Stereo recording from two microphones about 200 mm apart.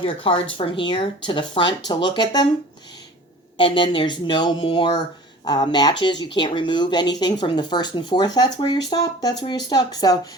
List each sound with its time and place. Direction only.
0.0 s speech: 25° left (ahead or behind)
3.6 s speech: 25° left (ahead or behind)